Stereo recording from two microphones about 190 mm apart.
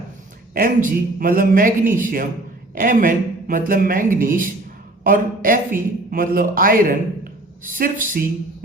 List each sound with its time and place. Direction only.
0.5 s a man's voice: 45° right (ahead or behind)